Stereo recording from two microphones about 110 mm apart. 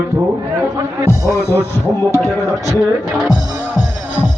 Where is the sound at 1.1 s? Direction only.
25° left (ahead or behind).